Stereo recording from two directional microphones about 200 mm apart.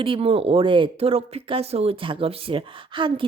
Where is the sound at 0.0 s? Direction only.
25° right (ahead or behind).